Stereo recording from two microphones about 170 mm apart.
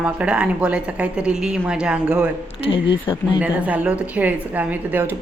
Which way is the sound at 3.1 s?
25° left (ahead or behind).